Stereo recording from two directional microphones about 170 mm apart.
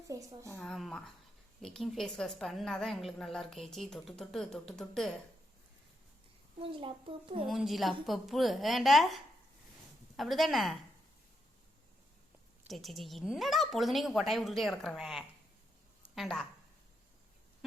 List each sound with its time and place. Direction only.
0.1 s a woman's voice: 20° right (ahead or behind)
0.5 s a woman's voice: 5° left (ahead or behind)
6.6 s a child's voice: 30° right (ahead or behind)
7.4 s a woman's voice: centre (ahead or behind)
12.6 s a woman's voice: centre (ahead or behind)